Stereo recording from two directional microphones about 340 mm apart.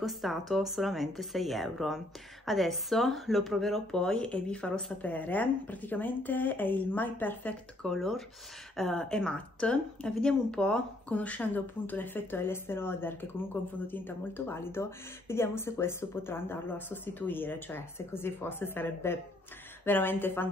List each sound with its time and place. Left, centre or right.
0.0 s a woman's voice: centre